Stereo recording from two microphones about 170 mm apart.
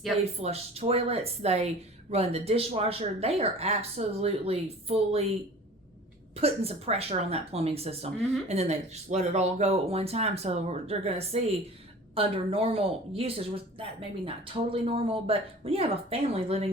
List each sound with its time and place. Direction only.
0.3 s a woman's voice: 40° right (ahead or behind)
6.3 s a woman's voice: 35° right (ahead or behind)